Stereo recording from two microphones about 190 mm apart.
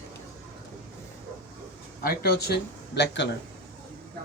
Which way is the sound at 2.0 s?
55° left (ahead or behind).